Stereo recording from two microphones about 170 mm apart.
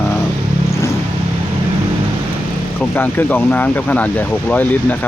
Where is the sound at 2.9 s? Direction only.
10° left (ahead or behind).